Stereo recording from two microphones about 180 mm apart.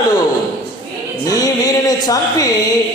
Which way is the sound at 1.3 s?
20° left (ahead or behind).